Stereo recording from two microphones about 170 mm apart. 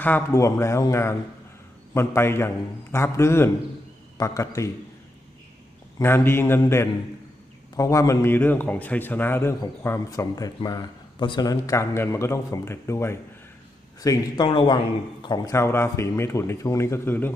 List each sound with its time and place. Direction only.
0.0 s a man's voice: 15° left (ahead or behind)
6.0 s a man's voice: 15° left (ahead or behind)